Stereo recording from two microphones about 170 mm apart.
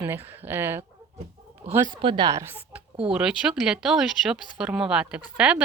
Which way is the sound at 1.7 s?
25° right (ahead or behind).